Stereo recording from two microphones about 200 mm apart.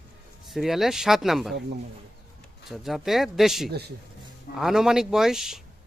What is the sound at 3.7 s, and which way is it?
Speech, 55° right (ahead or behind).